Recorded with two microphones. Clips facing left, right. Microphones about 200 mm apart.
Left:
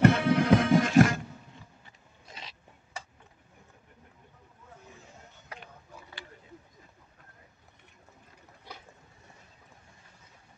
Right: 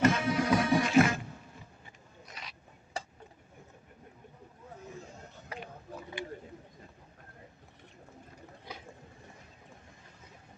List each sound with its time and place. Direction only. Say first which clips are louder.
0.0 s music: left 5 dB; 60° left (ahead or behind)
2.2 s zipper: left 1 dB; 25° left (ahead or behind)